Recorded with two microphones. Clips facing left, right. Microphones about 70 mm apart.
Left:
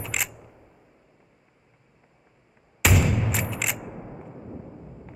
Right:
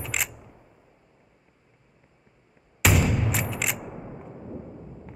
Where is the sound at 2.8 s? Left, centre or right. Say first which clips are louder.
Even; centre.